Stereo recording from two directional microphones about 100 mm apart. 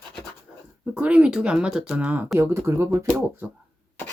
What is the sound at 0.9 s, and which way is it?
Speech, 10° right (ahead or behind).